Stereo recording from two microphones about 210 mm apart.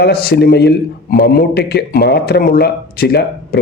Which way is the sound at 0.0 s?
50° left (ahead or behind).